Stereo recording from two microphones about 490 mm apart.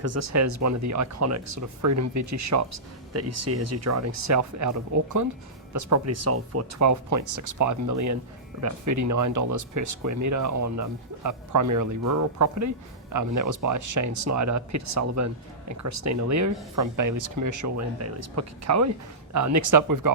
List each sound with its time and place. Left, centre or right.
0.0 s speech: right